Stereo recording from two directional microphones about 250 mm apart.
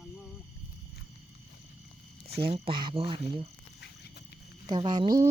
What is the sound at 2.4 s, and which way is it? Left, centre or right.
Speech, right.